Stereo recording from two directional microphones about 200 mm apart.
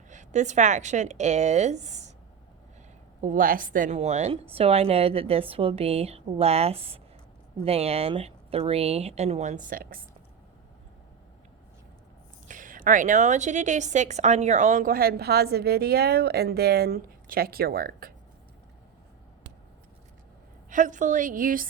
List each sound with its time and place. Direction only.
0.1 s a woman's voice: 35° right (ahead or behind)
3.2 s a woman's voice: 40° right (ahead or behind)
12.5 s a woman's voice: 40° right (ahead or behind)
20.7 s a woman's voice: 40° right (ahead or behind)